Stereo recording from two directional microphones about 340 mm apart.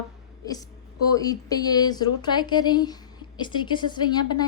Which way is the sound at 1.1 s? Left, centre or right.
Centre.